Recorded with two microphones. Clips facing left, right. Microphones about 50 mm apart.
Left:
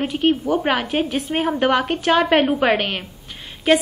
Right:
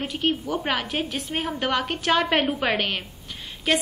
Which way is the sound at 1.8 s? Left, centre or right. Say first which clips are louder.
Left 5 dB; centre.